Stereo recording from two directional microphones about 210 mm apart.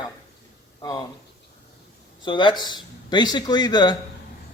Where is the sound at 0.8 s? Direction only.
20° left (ahead or behind).